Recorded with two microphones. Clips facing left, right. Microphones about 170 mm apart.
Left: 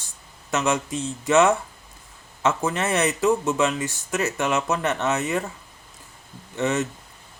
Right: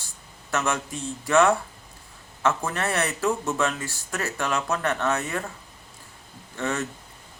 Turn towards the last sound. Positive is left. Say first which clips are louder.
# left 5 dB
turn(degrees=20)  # may be behind; listen again after turning